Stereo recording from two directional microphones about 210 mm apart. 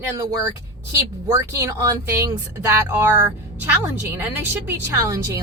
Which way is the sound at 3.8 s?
10° right (ahead or behind).